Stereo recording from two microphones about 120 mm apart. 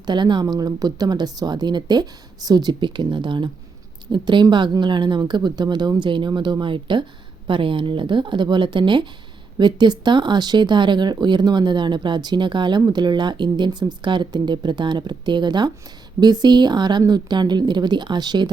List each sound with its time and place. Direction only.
0.0 s speech: 40° right (ahead or behind)